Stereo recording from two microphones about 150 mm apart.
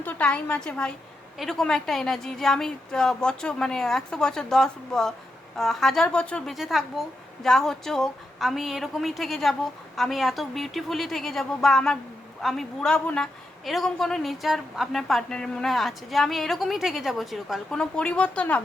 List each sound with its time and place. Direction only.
0.0 s a woman's voice: 10° left (ahead or behind)